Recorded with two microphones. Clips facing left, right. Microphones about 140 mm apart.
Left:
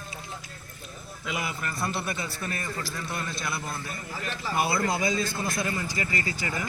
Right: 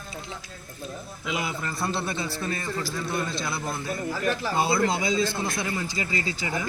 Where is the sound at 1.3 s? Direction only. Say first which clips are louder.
Right 2 dB; 20° right (ahead or behind).